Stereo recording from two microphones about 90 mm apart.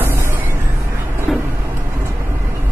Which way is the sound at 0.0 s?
30° right (ahead or behind).